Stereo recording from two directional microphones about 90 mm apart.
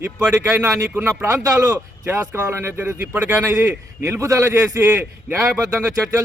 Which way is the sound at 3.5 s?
30° right (ahead or behind).